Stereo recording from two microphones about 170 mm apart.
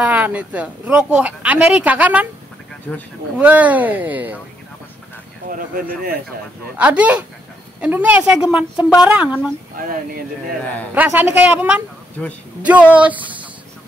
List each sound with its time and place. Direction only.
0.0 s speech: 10° right (ahead or behind)
2.9 s speech: 15° left (ahead or behind)
3.3 s speech: 10° right (ahead or behind)
5.5 s speech: 55° right (ahead or behind)
6.8 s speech: 5° right (ahead or behind)
9.8 s speech: 55° right (ahead or behind)
11.0 s speech: 10° right (ahead or behind)